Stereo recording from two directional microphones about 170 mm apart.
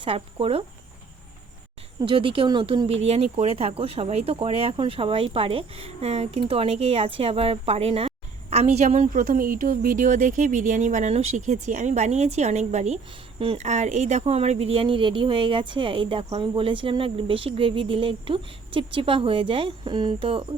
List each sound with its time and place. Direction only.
0.0 s speech: 35° right (ahead or behind)
2.0 s speech: 30° right (ahead or behind)
9.2 s speech: 55° right (ahead or behind); by 20.4 s 30° right (ahead or behind)